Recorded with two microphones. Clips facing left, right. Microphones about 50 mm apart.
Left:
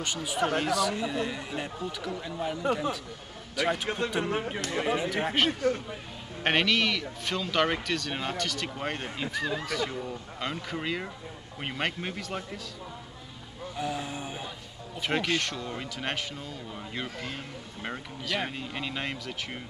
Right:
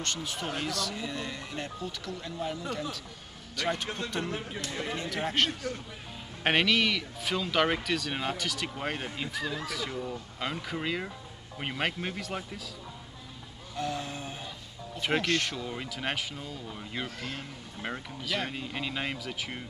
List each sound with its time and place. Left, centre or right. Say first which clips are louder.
0.0 s speech: left 5 dB; centre
4.3 s speech: left 5 dB; left
4.9 s speech: right 1 dB; centre
6.4 s speech: even; centre
13.7 s a sound: left 1 dB; centre
15.0 s speech: even; centre